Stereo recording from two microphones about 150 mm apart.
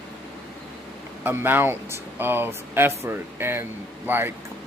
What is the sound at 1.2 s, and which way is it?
Speech, 15° right (ahead or behind).